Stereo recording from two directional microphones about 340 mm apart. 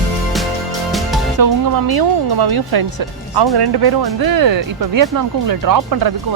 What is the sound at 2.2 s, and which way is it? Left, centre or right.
Speech, right.